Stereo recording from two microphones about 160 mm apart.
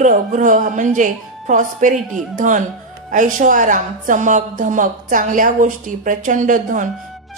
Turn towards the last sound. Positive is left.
turn(degrees=-55)  # may be behind; listen again after turning